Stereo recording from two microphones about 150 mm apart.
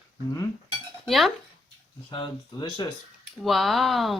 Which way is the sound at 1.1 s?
Centre (ahead or behind).